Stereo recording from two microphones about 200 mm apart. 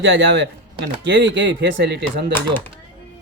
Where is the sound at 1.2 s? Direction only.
60° right (ahead or behind).